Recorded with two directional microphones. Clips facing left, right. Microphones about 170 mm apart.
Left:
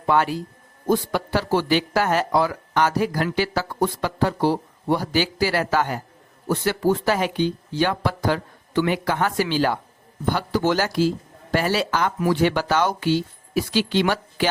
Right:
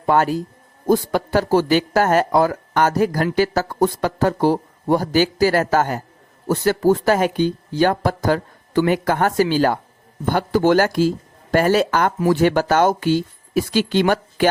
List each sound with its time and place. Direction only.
0.0 s a man's voice: 45° right (ahead or behind)